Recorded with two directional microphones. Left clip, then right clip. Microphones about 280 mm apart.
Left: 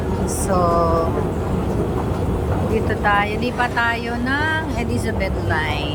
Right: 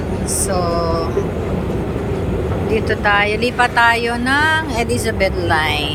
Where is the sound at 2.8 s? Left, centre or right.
Centre.